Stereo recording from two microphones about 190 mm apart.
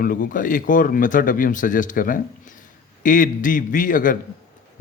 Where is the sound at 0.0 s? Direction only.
45° left (ahead or behind).